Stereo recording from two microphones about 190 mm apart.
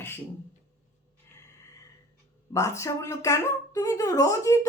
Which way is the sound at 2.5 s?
15° left (ahead or behind).